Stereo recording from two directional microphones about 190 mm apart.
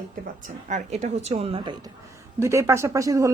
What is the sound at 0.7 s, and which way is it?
Speech, 35° right (ahead or behind).